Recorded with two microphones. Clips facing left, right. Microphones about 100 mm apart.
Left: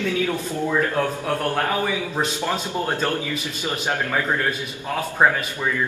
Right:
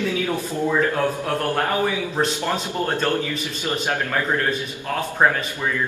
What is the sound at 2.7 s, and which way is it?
A man's voice, 15° left (ahead or behind).